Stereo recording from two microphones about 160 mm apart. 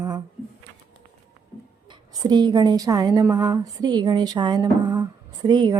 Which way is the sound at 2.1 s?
25° right (ahead or behind).